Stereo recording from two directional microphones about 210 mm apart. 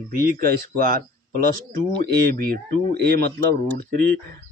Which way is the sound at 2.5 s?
45° right (ahead or behind).